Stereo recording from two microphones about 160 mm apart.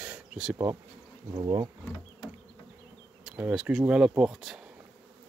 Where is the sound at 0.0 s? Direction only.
5° right (ahead or behind).